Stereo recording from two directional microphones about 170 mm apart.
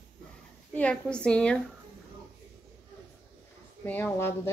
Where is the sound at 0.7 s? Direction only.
5° left (ahead or behind).